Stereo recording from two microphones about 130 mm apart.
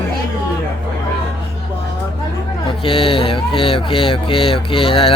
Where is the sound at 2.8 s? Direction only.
45° left (ahead or behind).